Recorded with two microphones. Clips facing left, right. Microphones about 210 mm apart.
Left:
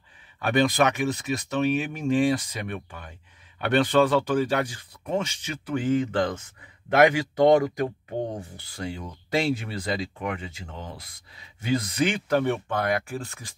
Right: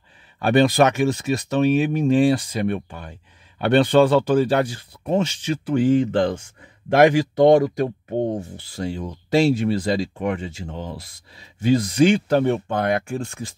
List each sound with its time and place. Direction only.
0.4 s speech: 30° right (ahead or behind)